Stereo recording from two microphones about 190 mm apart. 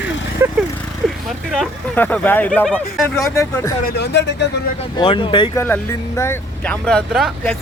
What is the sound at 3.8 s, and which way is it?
Speech, 60° left (ahead or behind).